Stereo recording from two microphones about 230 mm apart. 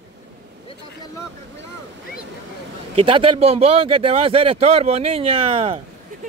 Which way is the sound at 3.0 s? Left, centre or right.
Right.